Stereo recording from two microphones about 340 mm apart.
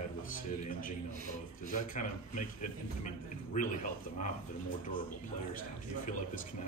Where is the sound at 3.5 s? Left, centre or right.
Left.